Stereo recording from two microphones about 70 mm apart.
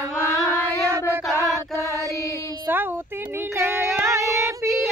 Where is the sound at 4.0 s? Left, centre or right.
Right.